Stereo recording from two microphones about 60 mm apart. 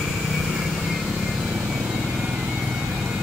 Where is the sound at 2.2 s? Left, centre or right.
Right.